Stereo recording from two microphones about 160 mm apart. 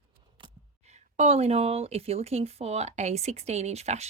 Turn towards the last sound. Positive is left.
turn(degrees=-45)  # may be behind; listen again after turning